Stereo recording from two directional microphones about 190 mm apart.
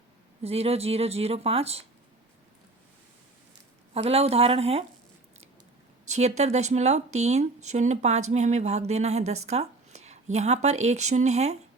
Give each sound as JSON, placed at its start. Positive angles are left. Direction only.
{"t": 0.4, "sound": "speech", "side_deg": -30}
{"t": 3.9, "sound": "speech", "side_deg": -30}
{"t": 6.1, "sound": "speech", "side_deg": -35}